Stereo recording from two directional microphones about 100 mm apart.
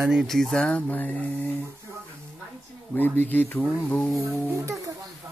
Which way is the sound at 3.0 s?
15° left (ahead or behind).